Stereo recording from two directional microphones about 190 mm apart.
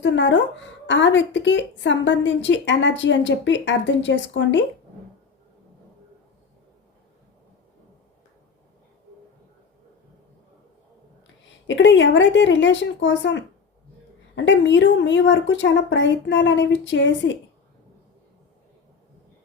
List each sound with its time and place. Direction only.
0.0 s a woman's voice: 70° left (ahead or behind)
11.6 s a woman's voice: 75° left (ahead or behind)